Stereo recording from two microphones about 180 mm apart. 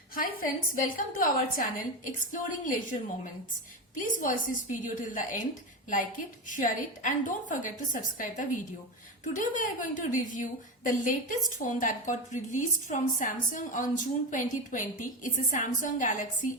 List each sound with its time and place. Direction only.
0.1 s a woman's voice: 50° left (ahead or behind)